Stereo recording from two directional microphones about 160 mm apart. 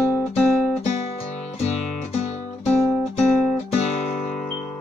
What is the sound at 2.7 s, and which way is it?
Guitar, 10° left (ahead or behind).